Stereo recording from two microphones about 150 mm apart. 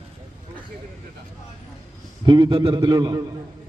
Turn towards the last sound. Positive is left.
turn(degrees=-30)  # may be behind; listen again after turning